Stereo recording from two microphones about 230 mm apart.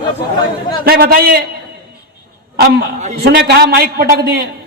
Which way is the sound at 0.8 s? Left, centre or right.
Right.